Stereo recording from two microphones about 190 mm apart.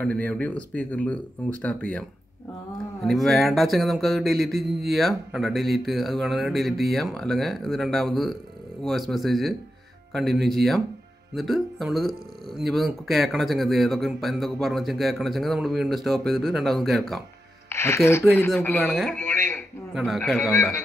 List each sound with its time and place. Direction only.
0.0 s speech: 5° left (ahead or behind)
3.0 s speech: centre (ahead or behind)
17.6 s speech: 15° left (ahead or behind)
19.9 s speech: centre (ahead or behind)